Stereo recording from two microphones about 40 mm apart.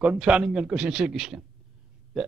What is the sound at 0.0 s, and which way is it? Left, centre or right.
A man's voice, right.